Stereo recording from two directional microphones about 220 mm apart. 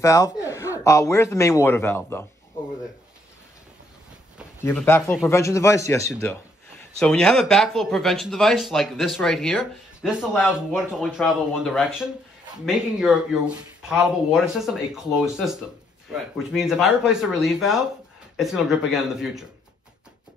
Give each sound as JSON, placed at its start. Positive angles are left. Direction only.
{"t": 0.0, "sound": "speech", "side_deg": 15}
{"t": 4.6, "sound": "speech", "side_deg": 10}